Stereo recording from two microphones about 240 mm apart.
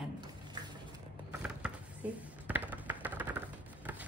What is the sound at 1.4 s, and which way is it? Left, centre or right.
Computer keyboard, centre.